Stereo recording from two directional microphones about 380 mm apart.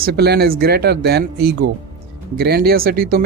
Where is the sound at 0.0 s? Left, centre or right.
Right.